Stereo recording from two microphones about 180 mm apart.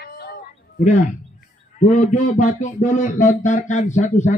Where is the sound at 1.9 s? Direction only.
40° left (ahead or behind).